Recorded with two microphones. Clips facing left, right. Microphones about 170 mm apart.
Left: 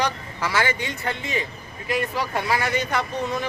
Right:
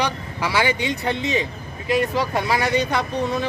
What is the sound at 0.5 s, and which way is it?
Speech, 20° right (ahead or behind).